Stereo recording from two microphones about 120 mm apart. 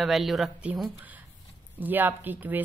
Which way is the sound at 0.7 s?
15° right (ahead or behind).